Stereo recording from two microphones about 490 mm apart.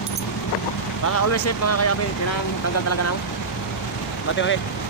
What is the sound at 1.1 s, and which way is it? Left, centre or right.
Speech, left.